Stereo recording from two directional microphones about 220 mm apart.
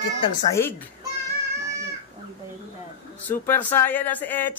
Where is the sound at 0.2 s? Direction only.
15° left (ahead or behind).